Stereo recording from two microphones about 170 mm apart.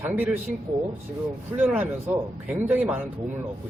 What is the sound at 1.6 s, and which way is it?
A man's voice, 10° right (ahead or behind).